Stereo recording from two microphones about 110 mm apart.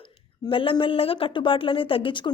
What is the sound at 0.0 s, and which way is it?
A woman's voice, 50° left (ahead or behind).